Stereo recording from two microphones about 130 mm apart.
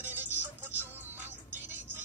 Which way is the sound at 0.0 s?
15° right (ahead or behind).